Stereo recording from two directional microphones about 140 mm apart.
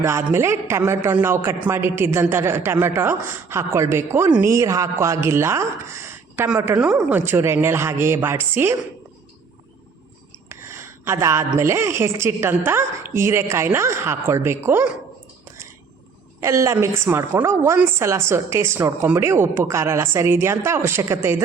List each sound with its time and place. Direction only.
0.0 s a woman's voice: 20° right (ahead or behind)
10.5 s a sound: 20° right (ahead or behind)
11.6 s a woman's voice: 20° right (ahead or behind)
16.4 s a woman's voice: 20° right (ahead or behind)